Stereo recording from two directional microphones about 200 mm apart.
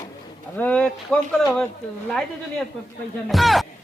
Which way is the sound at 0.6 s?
5° left (ahead or behind).